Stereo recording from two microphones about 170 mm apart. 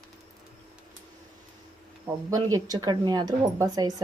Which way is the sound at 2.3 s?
20° right (ahead or behind).